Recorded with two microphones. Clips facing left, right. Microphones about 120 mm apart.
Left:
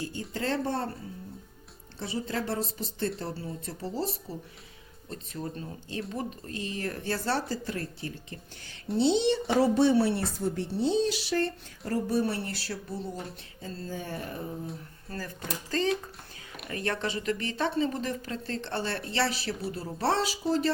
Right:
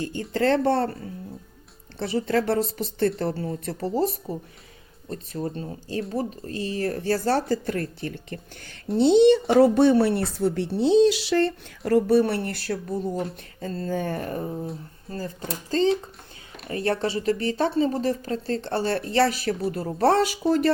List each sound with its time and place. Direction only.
0.0 s a woman's voice: 65° right (ahead or behind)
2.0 s a woman's voice: 70° right (ahead or behind); by 4.4 s 50° right (ahead or behind)
5.1 s a woman's voice: 40° right (ahead or behind); by 11.5 s 80° right
11.9 s speech: 70° right (ahead or behind); by 14.5 s 45° right (ahead or behind)
15.4 s speech: 30° right (ahead or behind); by 20.7 s 60° right (ahead or behind)